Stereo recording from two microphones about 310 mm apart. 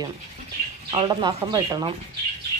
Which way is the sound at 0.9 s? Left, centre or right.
Centre.